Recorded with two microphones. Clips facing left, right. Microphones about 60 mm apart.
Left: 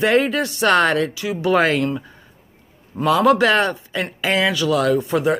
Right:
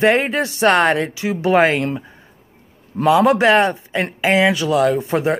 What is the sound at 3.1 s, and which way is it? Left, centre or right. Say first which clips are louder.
Speech: right 2 dB; right.